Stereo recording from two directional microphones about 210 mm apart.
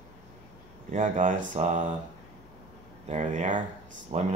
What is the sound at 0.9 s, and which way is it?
Speech, 40° right (ahead or behind).